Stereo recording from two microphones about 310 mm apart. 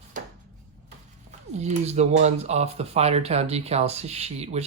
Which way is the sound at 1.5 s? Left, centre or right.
Right.